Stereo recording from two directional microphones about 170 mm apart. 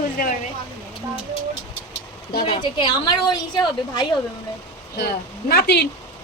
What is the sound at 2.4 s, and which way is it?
A woman's voice, 30° left (ahead or behind).